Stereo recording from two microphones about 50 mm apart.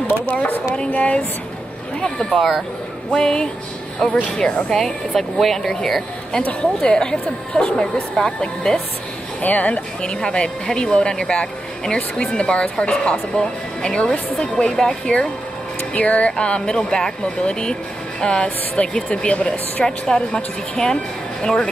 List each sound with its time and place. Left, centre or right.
0.3 s speech: left
2.2 s speech: centre
3.1 s speech: centre
6.3 s speech: centre
9.4 s speech: left
10.0 s speech: centre